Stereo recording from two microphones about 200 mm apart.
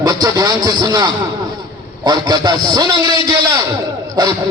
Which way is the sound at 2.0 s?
20° right (ahead or behind).